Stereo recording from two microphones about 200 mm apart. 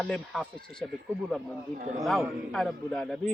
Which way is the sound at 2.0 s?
Centre (ahead or behind).